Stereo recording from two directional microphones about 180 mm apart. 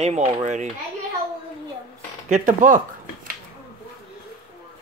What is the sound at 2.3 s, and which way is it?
Speech, 45° right (ahead or behind).